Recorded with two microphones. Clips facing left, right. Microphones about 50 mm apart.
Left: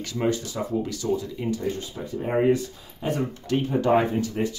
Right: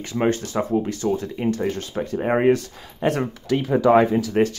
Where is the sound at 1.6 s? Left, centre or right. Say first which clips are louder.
Right 5 dB; right.